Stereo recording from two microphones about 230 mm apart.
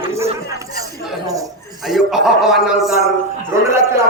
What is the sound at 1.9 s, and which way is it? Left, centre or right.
Speech, centre.